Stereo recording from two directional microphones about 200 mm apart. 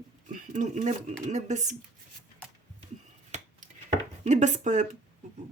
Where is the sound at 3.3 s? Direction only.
35° right (ahead or behind).